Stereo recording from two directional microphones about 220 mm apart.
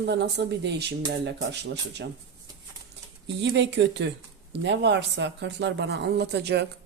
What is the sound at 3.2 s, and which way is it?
Speech, 50° right (ahead or behind).